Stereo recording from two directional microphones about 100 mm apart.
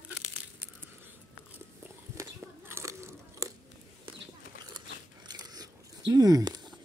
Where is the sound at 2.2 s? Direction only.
30° right (ahead or behind).